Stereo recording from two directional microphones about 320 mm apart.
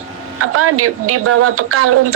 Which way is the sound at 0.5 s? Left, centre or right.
Right.